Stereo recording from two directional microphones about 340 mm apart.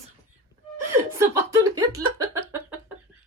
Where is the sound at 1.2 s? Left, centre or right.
Centre.